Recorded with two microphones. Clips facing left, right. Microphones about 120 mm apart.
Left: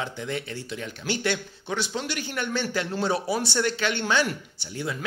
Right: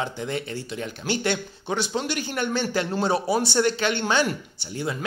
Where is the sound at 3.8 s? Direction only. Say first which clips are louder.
Right 2 dB; 40° right (ahead or behind).